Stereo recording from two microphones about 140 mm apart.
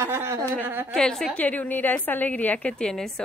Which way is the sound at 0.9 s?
5° left (ahead or behind).